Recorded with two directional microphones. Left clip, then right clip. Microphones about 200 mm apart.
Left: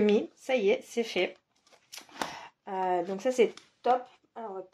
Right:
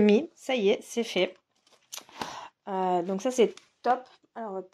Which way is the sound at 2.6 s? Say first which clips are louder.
Right 2 dB; 40° right (ahead or behind).